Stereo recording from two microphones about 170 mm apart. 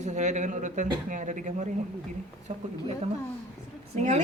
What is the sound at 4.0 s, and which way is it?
Speech, 45° right (ahead or behind).